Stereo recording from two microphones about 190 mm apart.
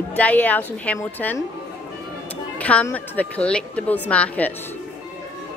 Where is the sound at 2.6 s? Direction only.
5° left (ahead or behind).